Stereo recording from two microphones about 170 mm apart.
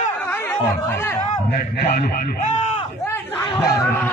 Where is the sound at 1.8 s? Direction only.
75° left (ahead or behind).